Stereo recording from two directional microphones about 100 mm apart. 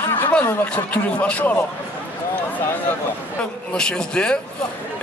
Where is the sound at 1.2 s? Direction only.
15° left (ahead or behind).